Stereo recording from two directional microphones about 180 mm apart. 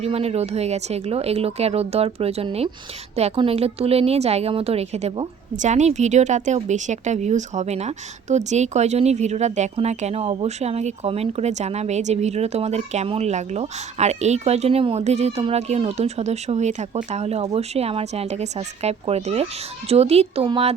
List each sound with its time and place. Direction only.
0.0 s a woman's voice: 35° right (ahead or behind)